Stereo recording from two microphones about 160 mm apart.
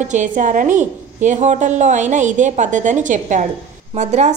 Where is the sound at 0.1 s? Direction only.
50° right (ahead or behind).